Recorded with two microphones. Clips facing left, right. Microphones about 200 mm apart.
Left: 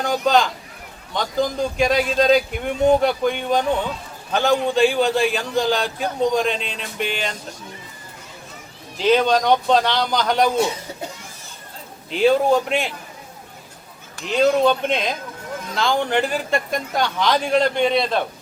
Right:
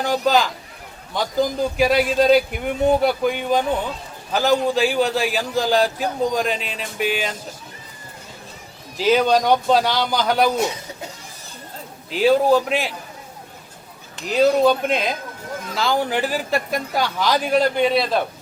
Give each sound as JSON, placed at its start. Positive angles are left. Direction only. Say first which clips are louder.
{"t": 0.0, "sound": "a man's voice", "louder": "even", "side_deg": 0}
{"t": 9.0, "sound": "a man's voice", "louder": "even", "side_deg": -5}
{"t": 12.1, "sound": "a man's voice", "louder": "right 1 dB", "side_deg": 0}
{"t": 14.3, "sound": "a man's voice", "louder": "right 1 dB", "side_deg": -5}